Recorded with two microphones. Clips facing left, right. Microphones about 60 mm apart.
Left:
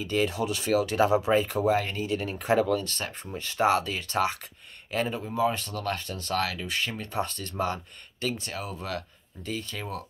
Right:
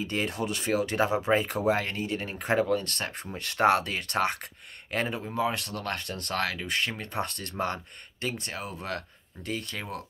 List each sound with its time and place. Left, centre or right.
0.0 s speech: right
1.7 s speech: right
2.7 s speech: right
5.3 s speech: right